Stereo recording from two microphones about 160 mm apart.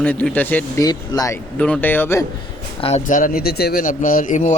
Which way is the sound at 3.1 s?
60° left (ahead or behind).